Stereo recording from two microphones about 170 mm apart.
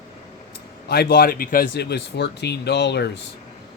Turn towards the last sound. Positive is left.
turn(degrees=80)